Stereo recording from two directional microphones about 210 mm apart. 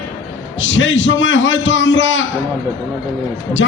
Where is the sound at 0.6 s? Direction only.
65° left (ahead or behind).